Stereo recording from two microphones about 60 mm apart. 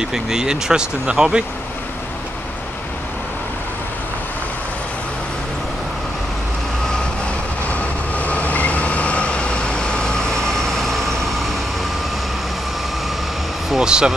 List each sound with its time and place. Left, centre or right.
0.0 s speech: centre
8.2 s vehicle: left; by 11.3 s centre
13.7 s air conditioning: centre